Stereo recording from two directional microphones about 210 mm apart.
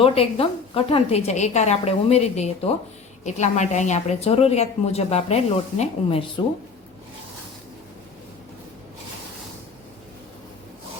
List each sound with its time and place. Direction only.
0.0 s a woman's voice: 25° left (ahead or behind)